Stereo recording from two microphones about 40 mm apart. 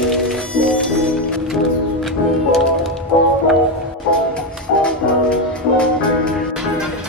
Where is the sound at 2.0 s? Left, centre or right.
Centre.